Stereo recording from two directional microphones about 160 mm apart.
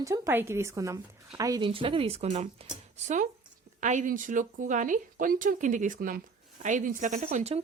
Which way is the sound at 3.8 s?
50° right (ahead or behind).